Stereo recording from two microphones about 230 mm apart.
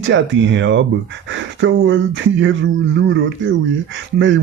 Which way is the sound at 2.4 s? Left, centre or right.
Right.